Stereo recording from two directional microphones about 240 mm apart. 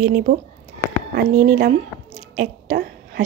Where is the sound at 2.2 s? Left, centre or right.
Right.